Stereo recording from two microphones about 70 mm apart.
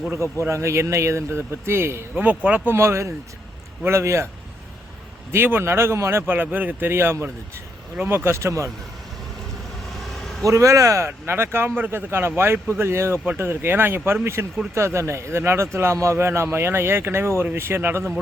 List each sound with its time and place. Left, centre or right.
0.4 s speech: right
2.1 s speech: right
2.7 s speech: right
5.3 s speech: right
6.2 s speech: right
10.4 s speech: right